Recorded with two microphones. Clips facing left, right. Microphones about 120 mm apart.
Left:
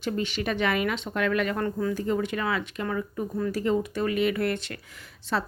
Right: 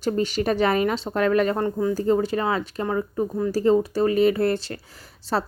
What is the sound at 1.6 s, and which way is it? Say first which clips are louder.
Speech: right 4 dB; 20° right (ahead or behind).